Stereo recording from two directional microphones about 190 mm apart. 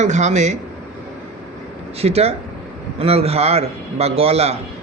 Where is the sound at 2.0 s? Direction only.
35° right (ahead or behind).